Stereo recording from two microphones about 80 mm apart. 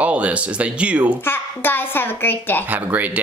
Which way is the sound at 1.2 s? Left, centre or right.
Left.